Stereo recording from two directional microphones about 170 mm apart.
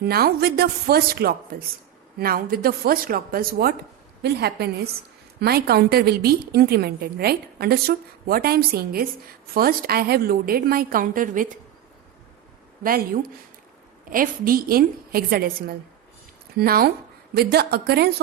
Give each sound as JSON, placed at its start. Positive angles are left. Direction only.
{"t": 0.0, "sound": "a woman's voice", "side_deg": -65}
{"t": 4.2, "sound": "a woman's voice", "side_deg": -70}
{"t": 14.1, "sound": "a woman's voice", "side_deg": -55}